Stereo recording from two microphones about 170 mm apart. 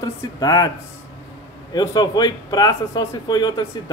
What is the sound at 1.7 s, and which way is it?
Speech, 25° left (ahead or behind).